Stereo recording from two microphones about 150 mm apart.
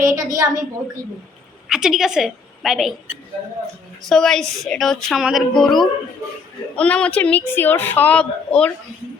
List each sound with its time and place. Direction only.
0.1 s a woman's voice: 25° right (ahead or behind)
1.6 s a woman's voice: 5° right (ahead or behind)
4.1 s speech: 5° left (ahead or behind)